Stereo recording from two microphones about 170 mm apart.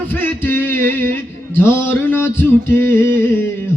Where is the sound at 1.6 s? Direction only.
15° left (ahead or behind).